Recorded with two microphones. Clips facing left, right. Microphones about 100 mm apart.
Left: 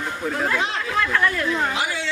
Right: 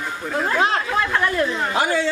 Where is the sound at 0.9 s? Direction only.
25° right (ahead or behind).